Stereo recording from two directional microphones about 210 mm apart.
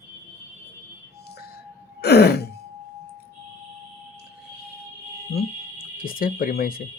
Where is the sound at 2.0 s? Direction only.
50° left (ahead or behind).